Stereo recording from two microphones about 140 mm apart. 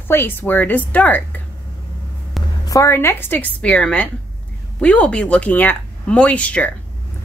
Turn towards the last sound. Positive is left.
turn(degrees=10)  # may be behind; listen again after turning